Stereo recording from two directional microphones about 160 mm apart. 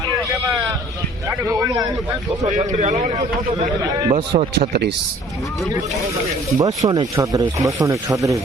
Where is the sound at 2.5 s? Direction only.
45° right (ahead or behind).